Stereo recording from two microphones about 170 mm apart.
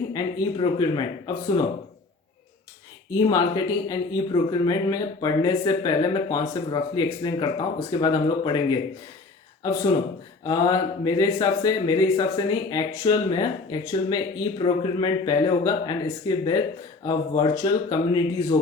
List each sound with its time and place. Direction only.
0.1 s speech: 20° left (ahead or behind)
3.2 s speech: 25° left (ahead or behind)
10.4 s speech: 20° left (ahead or behind)